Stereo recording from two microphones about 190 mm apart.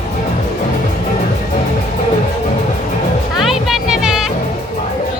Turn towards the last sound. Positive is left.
turn(degrees=-5)  # may be behind; listen again after turning